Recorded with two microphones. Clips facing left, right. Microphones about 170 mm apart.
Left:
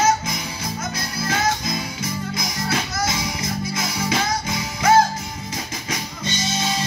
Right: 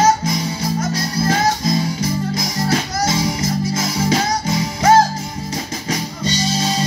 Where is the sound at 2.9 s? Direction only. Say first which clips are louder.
Right 6 dB; 30° right (ahead or behind).